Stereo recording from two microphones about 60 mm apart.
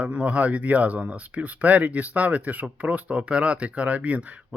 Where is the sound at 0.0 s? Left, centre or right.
Right.